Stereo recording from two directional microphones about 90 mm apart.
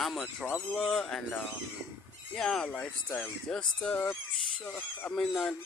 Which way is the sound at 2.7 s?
20° left (ahead or behind).